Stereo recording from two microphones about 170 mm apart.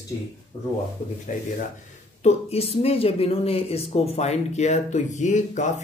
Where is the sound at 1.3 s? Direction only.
50° left (ahead or behind).